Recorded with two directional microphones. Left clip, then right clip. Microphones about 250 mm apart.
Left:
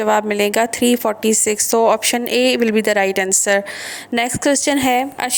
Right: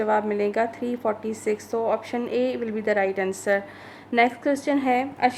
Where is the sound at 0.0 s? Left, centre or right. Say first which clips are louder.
Left 7 dB; left.